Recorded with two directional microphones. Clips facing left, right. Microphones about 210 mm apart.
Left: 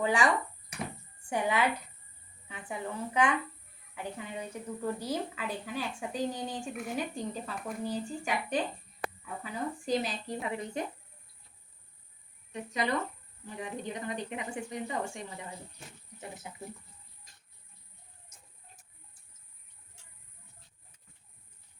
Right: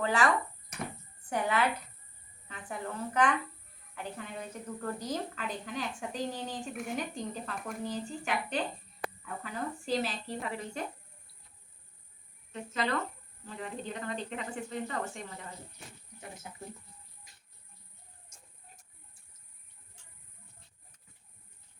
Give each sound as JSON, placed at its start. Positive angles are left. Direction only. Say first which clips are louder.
{"t": 0.0, "sound": "a woman's voice", "louder": "left 1 dB", "side_deg": 15}
{"t": 1.3, "sound": "a woman's voice", "louder": "left 1 dB", "side_deg": 10}
{"t": 12.5, "sound": "a woman's voice", "louder": "left 1 dB", "side_deg": 15}